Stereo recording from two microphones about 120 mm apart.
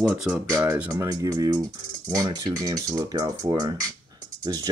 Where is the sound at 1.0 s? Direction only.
30° right (ahead or behind).